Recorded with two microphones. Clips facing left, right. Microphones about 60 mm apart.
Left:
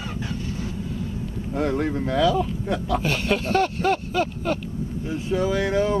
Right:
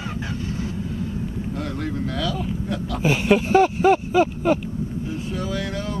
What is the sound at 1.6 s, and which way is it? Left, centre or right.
Speech, left.